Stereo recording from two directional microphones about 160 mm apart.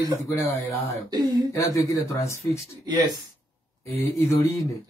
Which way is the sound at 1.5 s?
20° left (ahead or behind).